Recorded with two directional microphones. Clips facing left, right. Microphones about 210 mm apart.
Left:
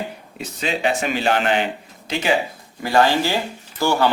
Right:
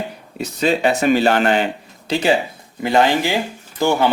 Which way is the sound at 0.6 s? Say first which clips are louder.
Right 6 dB; 40° right (ahead or behind).